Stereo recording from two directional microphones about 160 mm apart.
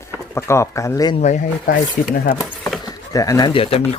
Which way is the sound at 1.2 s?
55° left (ahead or behind).